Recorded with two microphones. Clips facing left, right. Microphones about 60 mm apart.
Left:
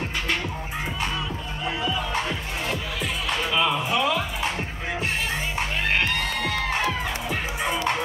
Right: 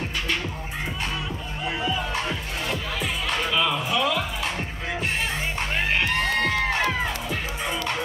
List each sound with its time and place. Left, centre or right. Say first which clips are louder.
1.8 s music: right 1 dB; centre
3.4 s music: left 2 dB; centre
7.2 s music: left 2 dB; centre